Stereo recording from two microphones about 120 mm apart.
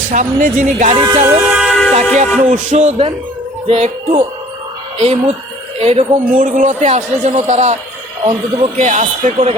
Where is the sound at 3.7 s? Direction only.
55° right (ahead or behind).